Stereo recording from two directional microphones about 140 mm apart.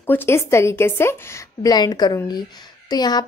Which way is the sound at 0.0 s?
15° left (ahead or behind).